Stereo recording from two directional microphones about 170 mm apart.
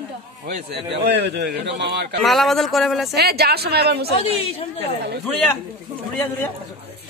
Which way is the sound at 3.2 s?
70° right (ahead or behind).